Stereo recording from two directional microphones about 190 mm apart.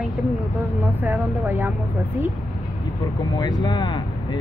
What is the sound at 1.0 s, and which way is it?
Speech, 10° right (ahead or behind).